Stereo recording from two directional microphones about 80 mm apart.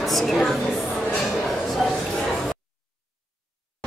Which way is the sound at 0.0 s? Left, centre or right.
Centre.